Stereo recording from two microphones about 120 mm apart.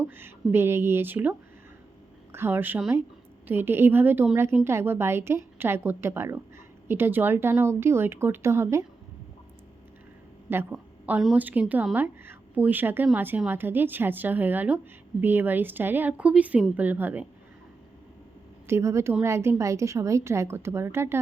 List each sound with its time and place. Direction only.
0.0 s a woman's voice: 15° right (ahead or behind)
10.5 s a woman's voice: 15° right (ahead or behind)
18.7 s a woman's voice: 25° right (ahead or behind)